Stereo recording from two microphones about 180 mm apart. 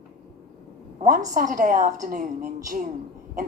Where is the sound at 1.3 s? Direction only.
45° right (ahead or behind).